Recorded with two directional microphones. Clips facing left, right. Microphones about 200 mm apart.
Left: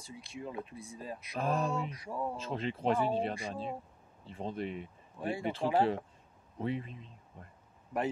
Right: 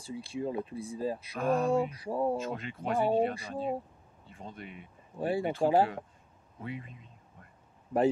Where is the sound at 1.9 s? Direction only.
30° right (ahead or behind).